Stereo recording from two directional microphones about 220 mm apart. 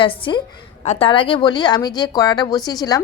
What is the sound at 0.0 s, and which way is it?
A woman's voice, 25° left (ahead or behind).